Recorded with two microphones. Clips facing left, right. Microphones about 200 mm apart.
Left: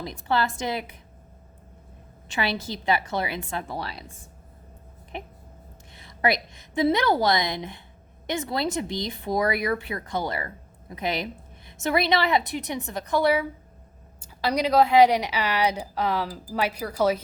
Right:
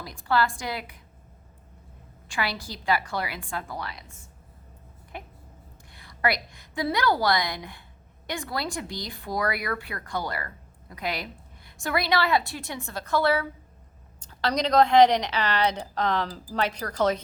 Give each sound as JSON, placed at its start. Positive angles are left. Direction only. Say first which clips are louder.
{"t": 0.0, "sound": "speech", "louder": "even", "side_deg": 20}
{"t": 2.2, "sound": "speech", "louder": "left 3 dB", "side_deg": 20}
{"t": 5.9, "sound": "a woman's voice", "louder": "left 3 dB", "side_deg": 20}